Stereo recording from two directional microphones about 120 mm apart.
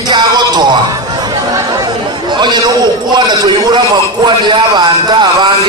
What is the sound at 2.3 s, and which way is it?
A man's voice, 40° right (ahead or behind).